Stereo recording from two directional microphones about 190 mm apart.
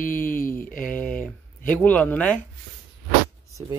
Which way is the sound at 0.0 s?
45° left (ahead or behind).